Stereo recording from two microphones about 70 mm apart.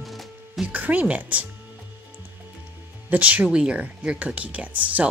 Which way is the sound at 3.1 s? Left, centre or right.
Right.